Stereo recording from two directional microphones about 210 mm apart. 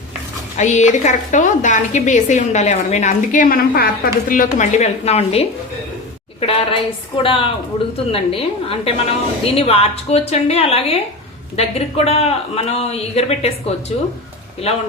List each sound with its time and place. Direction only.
0.5 s a woman's voice: 35° left (ahead or behind)